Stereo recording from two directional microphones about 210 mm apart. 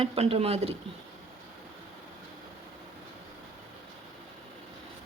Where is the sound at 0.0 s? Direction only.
30° right (ahead or behind).